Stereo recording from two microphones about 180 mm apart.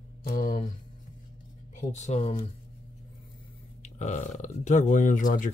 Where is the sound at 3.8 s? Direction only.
40° left (ahead or behind).